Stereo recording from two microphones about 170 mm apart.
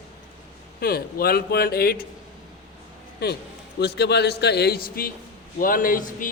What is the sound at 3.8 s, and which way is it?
A man's voice, 75° left (ahead or behind).